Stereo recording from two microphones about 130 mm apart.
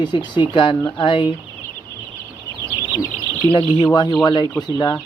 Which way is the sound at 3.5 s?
35° left (ahead or behind).